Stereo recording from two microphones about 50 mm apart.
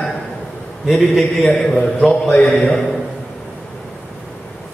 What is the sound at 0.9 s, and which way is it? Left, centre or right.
A man's voice, centre.